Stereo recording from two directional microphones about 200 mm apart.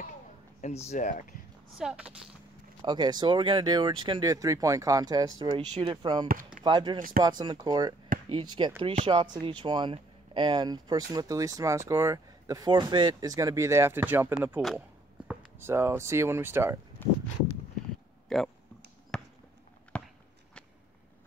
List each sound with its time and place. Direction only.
0.6 s speech: 35° left (ahead or behind)
1.8 s speech: 5° right (ahead or behind)
2.8 s speech: 20° right (ahead or behind)
6.2 s speech: 45° right (ahead or behind)
6.6 s speech: 20° right (ahead or behind)
8.1 s chop: 45° right (ahead or behind)
8.5 s speech: 20° right (ahead or behind)
18.3 s speech: centre (ahead or behind)
19.1 s basketball bounce: 5° left (ahead or behind)
19.9 s walk: 5° left (ahead or behind)